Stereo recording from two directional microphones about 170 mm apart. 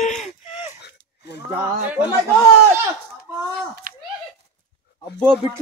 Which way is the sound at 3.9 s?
55° right (ahead or behind).